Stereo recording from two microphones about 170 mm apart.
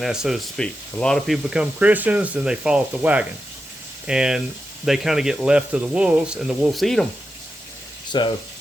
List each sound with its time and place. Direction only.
0.0 s speech: 5° right (ahead or behind)
8.1 s speech: 25° left (ahead or behind)